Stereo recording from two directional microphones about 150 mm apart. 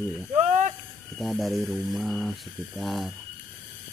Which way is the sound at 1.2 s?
Centre (ahead or behind).